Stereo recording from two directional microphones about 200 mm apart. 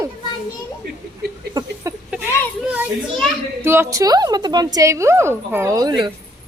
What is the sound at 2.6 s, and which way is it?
A child's voice, 5° right (ahead or behind).